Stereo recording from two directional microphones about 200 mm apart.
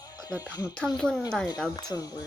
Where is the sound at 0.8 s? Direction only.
5° left (ahead or behind).